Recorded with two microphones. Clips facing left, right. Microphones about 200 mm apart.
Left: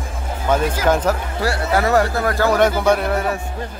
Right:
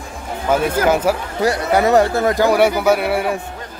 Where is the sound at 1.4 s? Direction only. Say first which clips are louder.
Right 3 dB; 20° right (ahead or behind).